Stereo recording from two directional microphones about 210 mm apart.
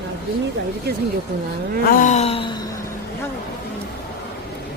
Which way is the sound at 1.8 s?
40° left (ahead or behind).